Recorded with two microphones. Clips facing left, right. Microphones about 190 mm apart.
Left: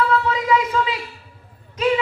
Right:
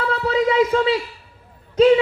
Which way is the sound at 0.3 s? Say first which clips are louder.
Right 4 dB; 35° right (ahead or behind).